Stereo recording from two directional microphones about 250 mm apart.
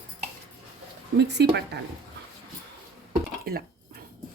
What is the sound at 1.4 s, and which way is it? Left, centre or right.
Speech, right.